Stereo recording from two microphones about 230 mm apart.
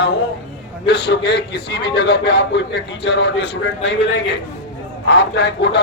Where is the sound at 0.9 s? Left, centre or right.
Left.